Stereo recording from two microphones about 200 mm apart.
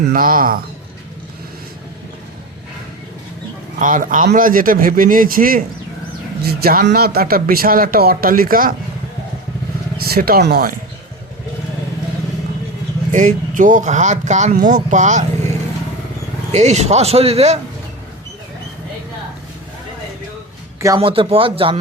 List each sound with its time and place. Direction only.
0.1 s speech: 45° right (ahead or behind)
3.8 s speech: 40° right (ahead or behind)
10.2 s speech: 50° right (ahead or behind)
13.1 s speech: 40° right (ahead or behind)
20.8 s speech: 20° right (ahead or behind)